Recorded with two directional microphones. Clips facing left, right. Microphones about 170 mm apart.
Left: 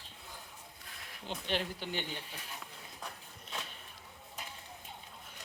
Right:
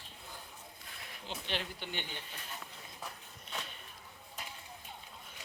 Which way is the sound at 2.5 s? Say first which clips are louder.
Even; centre (ahead or behind).